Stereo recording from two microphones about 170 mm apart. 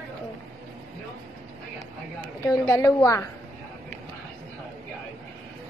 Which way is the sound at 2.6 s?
15° left (ahead or behind).